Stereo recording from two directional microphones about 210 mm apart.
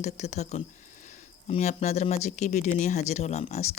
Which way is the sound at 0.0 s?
35° left (ahead or behind).